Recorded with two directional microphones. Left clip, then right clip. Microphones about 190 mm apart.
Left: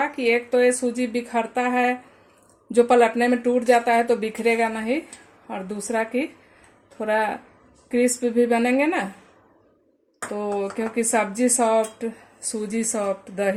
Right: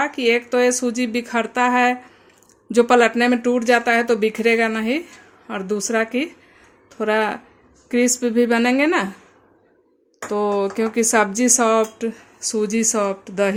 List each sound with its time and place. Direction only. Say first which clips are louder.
0.0 s speech: right 3 dB; 55° right (ahead or behind)
10.3 s speech: right 6 dB; 55° right (ahead or behind)